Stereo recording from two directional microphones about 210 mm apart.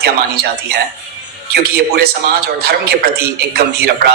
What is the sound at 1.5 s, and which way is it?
Speech, 50° right (ahead or behind).